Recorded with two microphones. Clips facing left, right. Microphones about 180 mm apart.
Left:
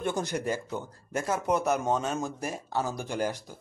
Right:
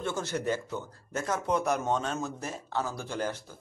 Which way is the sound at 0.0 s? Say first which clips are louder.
Left 2 dB; 15° left (ahead or behind).